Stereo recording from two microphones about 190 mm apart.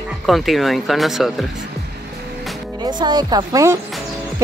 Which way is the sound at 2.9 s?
20° right (ahead or behind).